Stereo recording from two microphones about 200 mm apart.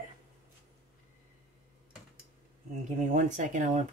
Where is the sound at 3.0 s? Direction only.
35° right (ahead or behind).